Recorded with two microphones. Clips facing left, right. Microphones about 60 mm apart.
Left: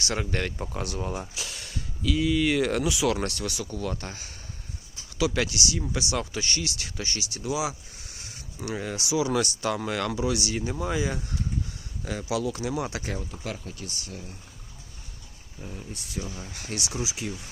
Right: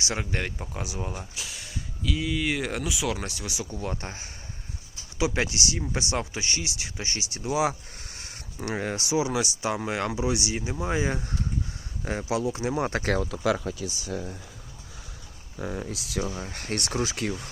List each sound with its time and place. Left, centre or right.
0.0 s speech: centre
3.7 s speech: right
9.3 s speech: centre
10.9 s speech: right
13.0 s speech: right
15.5 s speech: right
16.2 s speech: right